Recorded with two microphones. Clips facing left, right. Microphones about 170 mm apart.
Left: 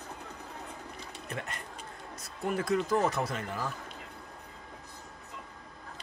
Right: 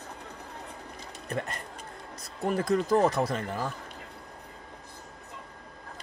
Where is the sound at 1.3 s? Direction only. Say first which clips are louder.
Right 6 dB; 35° right (ahead or behind).